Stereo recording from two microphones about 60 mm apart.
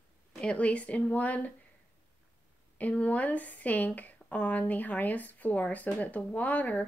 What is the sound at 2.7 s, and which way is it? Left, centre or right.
A woman's voice, left.